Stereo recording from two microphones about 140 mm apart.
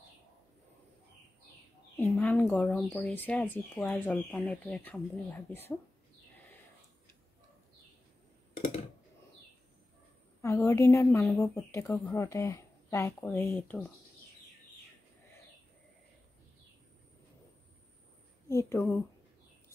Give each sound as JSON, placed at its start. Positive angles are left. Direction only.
{"t": 2.1, "sound": "speech", "side_deg": 10}
{"t": 10.4, "sound": "a woman's voice", "side_deg": 20}
{"t": 18.5, "sound": "speech", "side_deg": 20}